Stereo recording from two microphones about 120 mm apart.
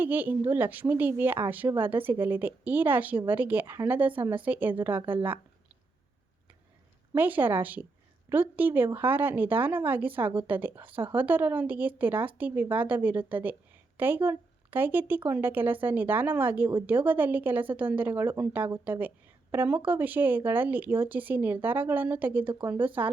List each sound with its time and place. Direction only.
0.0 s a woman's voice: 15° right (ahead or behind)
7.1 s a woman's voice: 15° right (ahead or behind)